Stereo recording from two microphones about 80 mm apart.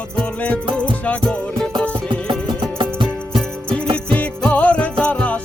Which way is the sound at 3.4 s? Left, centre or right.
Centre.